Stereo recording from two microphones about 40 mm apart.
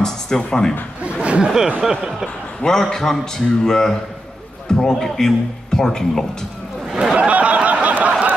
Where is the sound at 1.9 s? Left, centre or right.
Centre.